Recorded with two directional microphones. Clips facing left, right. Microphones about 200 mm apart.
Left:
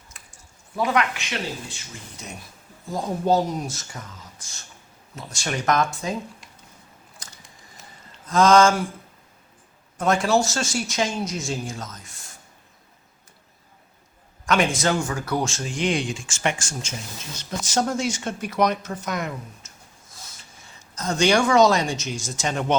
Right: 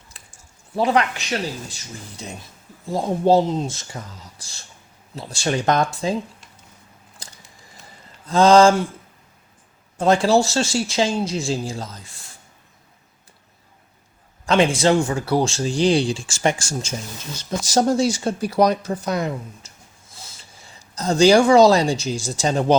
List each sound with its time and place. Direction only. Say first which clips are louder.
0.8 s speech: right 4 dB; 30° right (ahead or behind)
8.3 s speech: right 4 dB; 30° right (ahead or behind)
10.0 s speech: right 4 dB; 30° right (ahead or behind)
14.4 s speech: right 5 dB; 30° right (ahead or behind)